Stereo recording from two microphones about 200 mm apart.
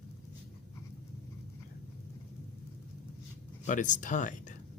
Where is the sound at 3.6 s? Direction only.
40° left (ahead or behind).